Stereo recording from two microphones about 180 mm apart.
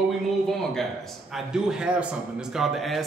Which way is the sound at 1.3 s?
5° right (ahead or behind).